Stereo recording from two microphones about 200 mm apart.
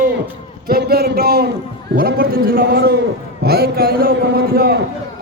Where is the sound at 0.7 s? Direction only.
50° right (ahead or behind).